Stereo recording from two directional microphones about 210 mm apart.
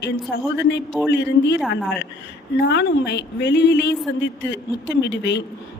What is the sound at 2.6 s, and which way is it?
A woman's voice, 55° left (ahead or behind).